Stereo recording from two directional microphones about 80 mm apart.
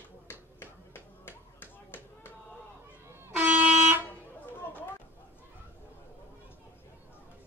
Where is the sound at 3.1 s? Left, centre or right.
Right.